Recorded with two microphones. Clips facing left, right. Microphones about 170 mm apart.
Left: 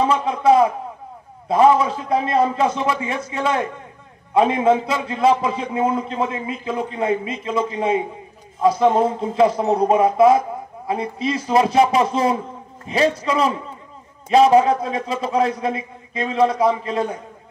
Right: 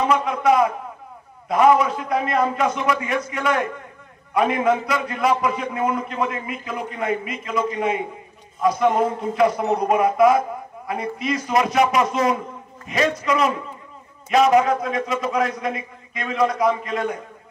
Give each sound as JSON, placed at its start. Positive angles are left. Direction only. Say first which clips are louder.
{"t": 0.0, "sound": "a man's voice", "louder": "left 2 dB", "side_deg": 30}